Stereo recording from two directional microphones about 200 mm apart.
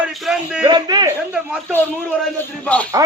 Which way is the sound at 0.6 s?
20° right (ahead or behind).